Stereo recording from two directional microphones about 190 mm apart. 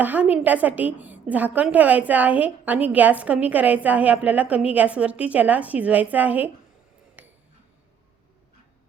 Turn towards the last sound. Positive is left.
turn(degrees=-10)  # may be behind; listen again after turning